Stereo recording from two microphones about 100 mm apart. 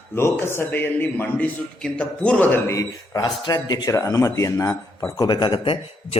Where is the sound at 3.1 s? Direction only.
45° left (ahead or behind); by 5.1 s 25° left (ahead or behind).